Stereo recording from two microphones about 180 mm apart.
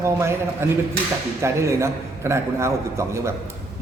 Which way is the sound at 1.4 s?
15° right (ahead or behind).